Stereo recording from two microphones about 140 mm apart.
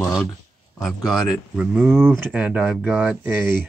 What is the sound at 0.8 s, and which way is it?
Speech, centre (ahead or behind).